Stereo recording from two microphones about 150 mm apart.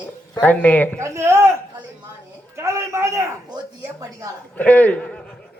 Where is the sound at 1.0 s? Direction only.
20° right (ahead or behind).